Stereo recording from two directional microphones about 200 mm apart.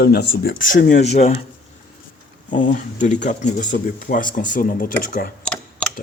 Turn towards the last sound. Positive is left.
turn(degrees=5)  # may be behind; listen again after turning